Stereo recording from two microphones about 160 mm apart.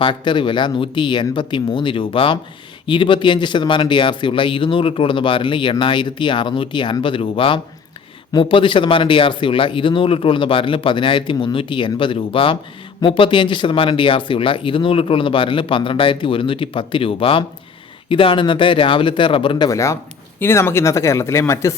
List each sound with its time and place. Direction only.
0.0 s a man's voice: 30° left (ahead or behind)